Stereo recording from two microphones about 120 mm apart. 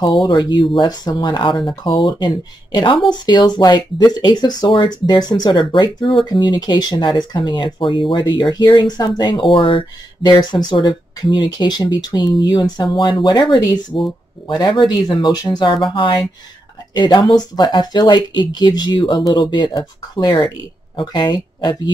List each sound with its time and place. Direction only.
0.0 s speech: 35° left (ahead or behind)